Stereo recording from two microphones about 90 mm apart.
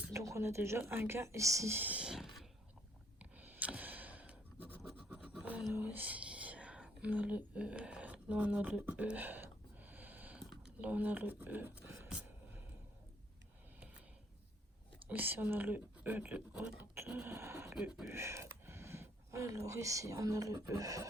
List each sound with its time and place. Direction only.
0.1 s speech: 35° right (ahead or behind)
1.8 s a sound: 15° right (ahead or behind)
3.2 s a sound: 15° right (ahead or behind)
4.8 s scratch: centre (ahead or behind)
5.4 s whispering: 15° right (ahead or behind)
10.8 s speech: 15° right (ahead or behind)
12.0 s a sound: 10° right (ahead or behind)
15.0 s speech: 20° right (ahead or behind)
17.3 s speech: 30° right (ahead or behind)
17.7 s speech: 10° right (ahead or behind)
18.1 s speech: 30° right (ahead or behind)